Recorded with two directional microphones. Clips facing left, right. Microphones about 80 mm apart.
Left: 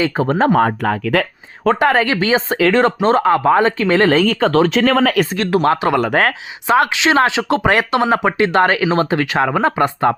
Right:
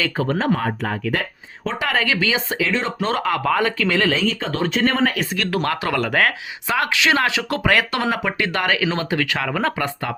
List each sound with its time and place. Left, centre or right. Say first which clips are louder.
0.0 s speech: left 5 dB; left
0.3 s speech: left 7 dB; left
1.6 s speech: left 8 dB; left
2.6 s speech: left 9 dB; left
3.0 s speech: left 8 dB; left
5.4 s speech: left 5 dB; left